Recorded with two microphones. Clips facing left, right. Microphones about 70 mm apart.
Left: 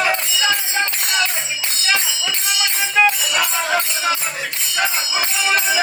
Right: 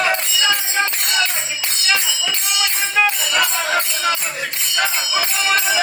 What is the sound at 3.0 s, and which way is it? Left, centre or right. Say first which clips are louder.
Music: left 1 dB; centre.